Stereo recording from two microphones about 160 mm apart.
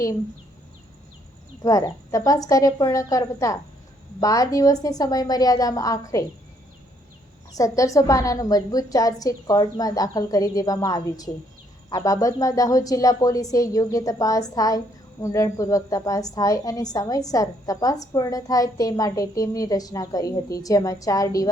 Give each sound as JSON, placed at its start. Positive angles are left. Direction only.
{"t": 1.6, "sound": "a woman's voice", "side_deg": 20}
{"t": 7.5, "sound": "a woman's voice", "side_deg": 20}